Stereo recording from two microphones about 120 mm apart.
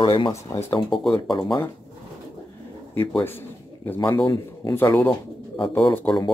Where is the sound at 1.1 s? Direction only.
45° left (ahead or behind).